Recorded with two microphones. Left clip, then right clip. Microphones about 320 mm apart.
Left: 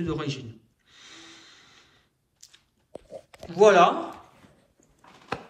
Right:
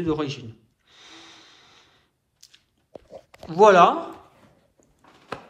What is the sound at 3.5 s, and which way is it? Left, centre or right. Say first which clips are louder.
Speech: right 3 dB; centre.